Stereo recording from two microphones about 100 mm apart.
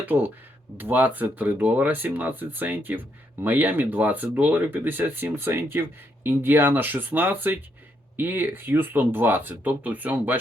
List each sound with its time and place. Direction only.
0.0 s speech: 20° right (ahead or behind)